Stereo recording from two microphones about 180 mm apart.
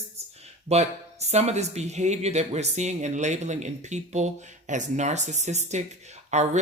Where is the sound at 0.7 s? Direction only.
35° right (ahead or behind).